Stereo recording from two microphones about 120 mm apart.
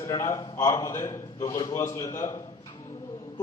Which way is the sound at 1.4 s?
35° left (ahead or behind).